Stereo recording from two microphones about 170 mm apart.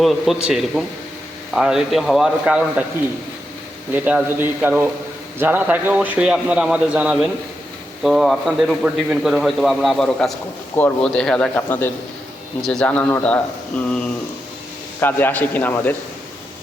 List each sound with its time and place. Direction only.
0.0 s a man's voice: centre (ahead or behind)
3.9 s a man's voice: 10° right (ahead or behind); by 16.0 s 10° left (ahead or behind)